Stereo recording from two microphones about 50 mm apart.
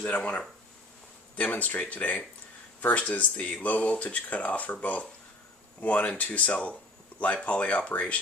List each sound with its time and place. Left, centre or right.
0.0 s speech: left